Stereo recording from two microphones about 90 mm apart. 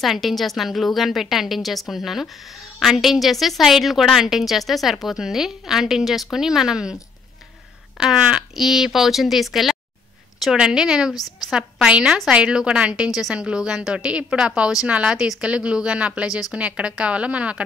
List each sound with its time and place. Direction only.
0.0 s a woman's voice: centre (ahead or behind)
8.0 s a woman's voice: 5° right (ahead or behind)
11.1 s a woman's voice: 45° left (ahead or behind)
11.4 s a woman's voice: 10° right (ahead or behind)